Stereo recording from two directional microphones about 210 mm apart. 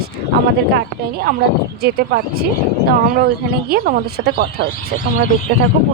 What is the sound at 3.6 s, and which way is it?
A woman's voice, 45° right (ahead or behind).